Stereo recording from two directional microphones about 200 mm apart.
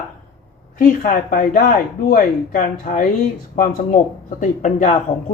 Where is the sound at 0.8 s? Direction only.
40° left (ahead or behind).